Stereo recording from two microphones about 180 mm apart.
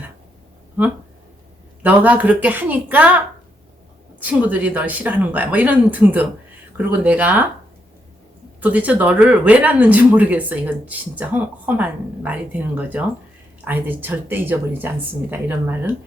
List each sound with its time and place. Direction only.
1.8 s speech: 10° right (ahead or behind)
8.6 s speech: 10° right (ahead or behind)